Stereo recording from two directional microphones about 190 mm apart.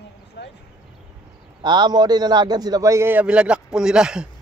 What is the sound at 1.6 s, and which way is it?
A man's voice, 25° right (ahead or behind).